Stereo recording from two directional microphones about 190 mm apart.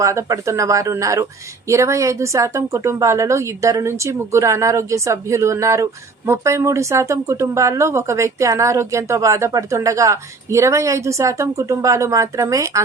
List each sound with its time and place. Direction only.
0.0 s speech: 15° right (ahead or behind)